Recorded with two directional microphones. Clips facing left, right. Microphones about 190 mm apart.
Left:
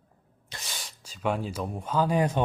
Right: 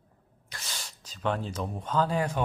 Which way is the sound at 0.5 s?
25° left (ahead or behind).